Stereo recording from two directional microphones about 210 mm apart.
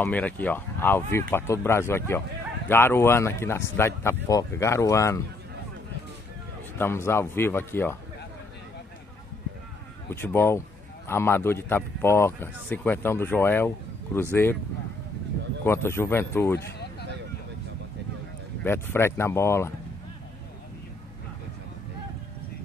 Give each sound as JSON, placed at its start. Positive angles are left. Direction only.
{"t": 0.0, "sound": "speech", "side_deg": 10}
{"t": 6.8, "sound": "speech", "side_deg": 10}
{"t": 10.0, "sound": "speech", "side_deg": 10}
{"t": 15.6, "sound": "speech", "side_deg": 10}
{"t": 18.6, "sound": "speech", "side_deg": 10}